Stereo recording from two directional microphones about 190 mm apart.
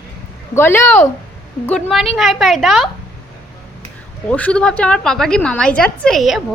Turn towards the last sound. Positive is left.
turn(degrees=0)  # may be behind; listen again after turning